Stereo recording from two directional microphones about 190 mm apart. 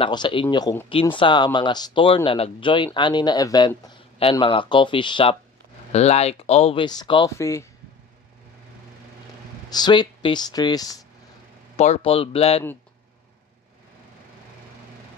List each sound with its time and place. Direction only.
0.0 s speech: 25° left (ahead or behind)
9.7 s speech: 20° left (ahead or behind)
11.7 s speech: 35° left (ahead or behind)